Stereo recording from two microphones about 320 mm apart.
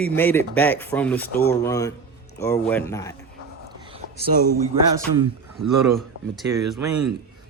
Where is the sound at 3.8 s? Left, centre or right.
Centre.